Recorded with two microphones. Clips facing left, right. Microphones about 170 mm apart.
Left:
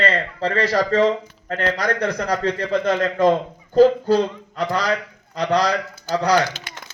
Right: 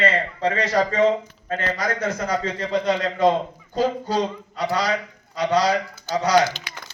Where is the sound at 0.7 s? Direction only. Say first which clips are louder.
Left 1 dB; 65° left (ahead or behind).